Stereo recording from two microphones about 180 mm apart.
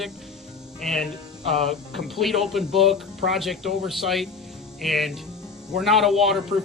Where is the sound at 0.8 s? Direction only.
Centre (ahead or behind).